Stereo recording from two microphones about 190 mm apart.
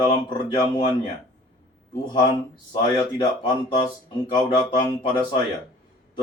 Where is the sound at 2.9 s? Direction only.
20° left (ahead or behind).